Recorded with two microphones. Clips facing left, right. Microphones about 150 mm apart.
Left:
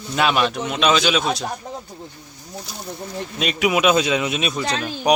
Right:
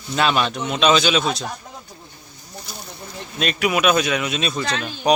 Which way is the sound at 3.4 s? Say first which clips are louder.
Left 1 dB; 15° left (ahead or behind).